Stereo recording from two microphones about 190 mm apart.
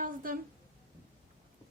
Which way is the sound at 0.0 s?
45° right (ahead or behind).